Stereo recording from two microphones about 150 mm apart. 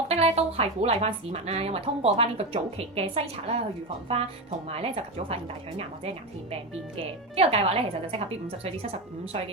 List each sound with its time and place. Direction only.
0.1 s a woman's voice: 45° right (ahead or behind)
4.7 s a woman's voice: 40° right (ahead or behind)
7.3 s a woman's voice: 40° right (ahead or behind)